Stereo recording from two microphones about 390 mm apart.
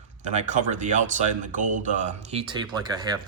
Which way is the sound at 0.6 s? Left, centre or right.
Centre.